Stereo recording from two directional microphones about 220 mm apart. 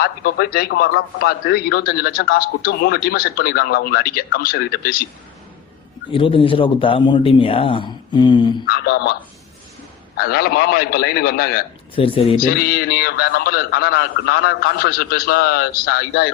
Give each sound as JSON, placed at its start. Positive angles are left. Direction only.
{"t": 0.0, "sound": "a man's voice", "side_deg": 40}
{"t": 6.1, "sound": "a man's voice", "side_deg": 25}
{"t": 8.6, "sound": "a man's voice", "side_deg": 45}
{"t": 10.2, "sound": "a man's voice", "side_deg": 45}
{"t": 11.9, "sound": "a man's voice", "side_deg": 25}
{"t": 12.4, "sound": "a man's voice", "side_deg": 45}